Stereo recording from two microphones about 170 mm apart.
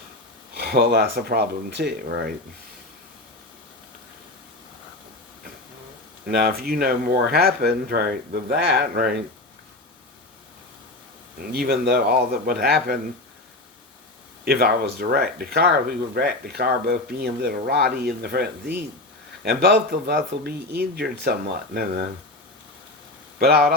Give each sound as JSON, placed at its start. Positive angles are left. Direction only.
{"t": 0.5, "sound": "speech", "side_deg": -65}
{"t": 6.2, "sound": "speech", "side_deg": -65}
{"t": 11.5, "sound": "speech", "side_deg": -65}
{"t": 14.4, "sound": "speech", "side_deg": -65}
{"t": 23.4, "sound": "speech", "side_deg": -65}